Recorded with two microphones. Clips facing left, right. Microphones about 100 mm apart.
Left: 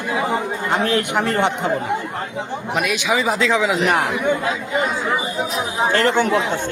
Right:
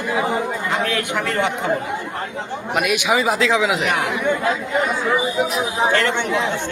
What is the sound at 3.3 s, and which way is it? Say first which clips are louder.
Speech: even; centre (ahead or behind).